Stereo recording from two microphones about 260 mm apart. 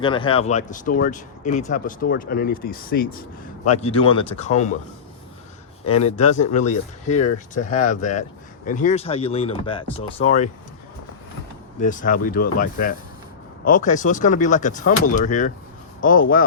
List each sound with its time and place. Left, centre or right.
0.0 s speech: centre; by 3.1 s left
3.7 s speech: left
6.0 s speech: left
11.8 s speech: left